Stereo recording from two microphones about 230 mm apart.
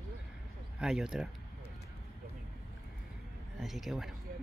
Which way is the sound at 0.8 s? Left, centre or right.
Centre.